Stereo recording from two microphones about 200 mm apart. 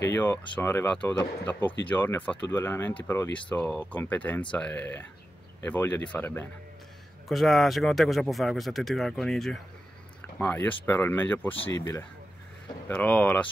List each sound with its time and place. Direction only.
0.1 s speech: 10° left (ahead or behind)